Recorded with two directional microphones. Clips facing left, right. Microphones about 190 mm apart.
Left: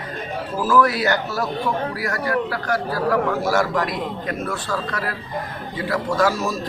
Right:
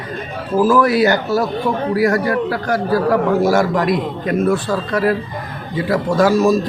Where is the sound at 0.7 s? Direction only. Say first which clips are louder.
Right 3 dB; 15° right (ahead or behind).